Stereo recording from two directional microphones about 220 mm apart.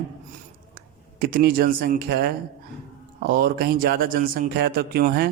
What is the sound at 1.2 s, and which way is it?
Speech, 45° right (ahead or behind).